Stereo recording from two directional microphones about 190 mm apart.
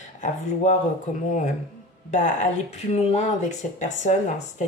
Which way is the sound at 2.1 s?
40° left (ahead or behind).